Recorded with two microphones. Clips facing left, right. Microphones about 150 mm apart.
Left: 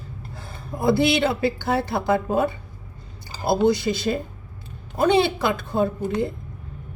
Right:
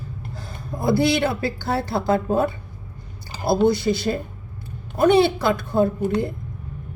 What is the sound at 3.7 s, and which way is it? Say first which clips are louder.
Speech: right 1 dB; 20° left (ahead or behind).